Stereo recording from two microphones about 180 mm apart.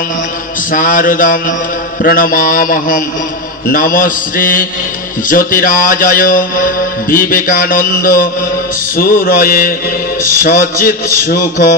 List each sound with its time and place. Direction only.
0.7 s a man's voice: 50° left (ahead or behind)